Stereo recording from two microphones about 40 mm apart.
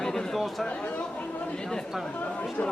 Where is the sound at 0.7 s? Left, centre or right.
Left.